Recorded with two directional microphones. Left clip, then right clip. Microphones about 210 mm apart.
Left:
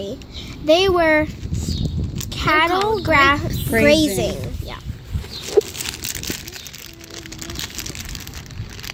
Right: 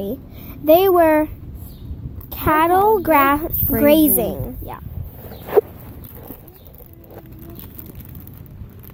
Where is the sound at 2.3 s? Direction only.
45° right (ahead or behind).